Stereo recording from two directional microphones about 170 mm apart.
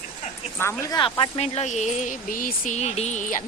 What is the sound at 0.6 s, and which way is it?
Speech, 15° left (ahead or behind).